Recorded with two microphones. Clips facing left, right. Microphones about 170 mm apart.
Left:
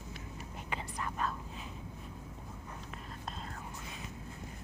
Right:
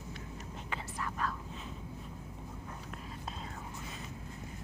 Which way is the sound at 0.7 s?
20° left (ahead or behind).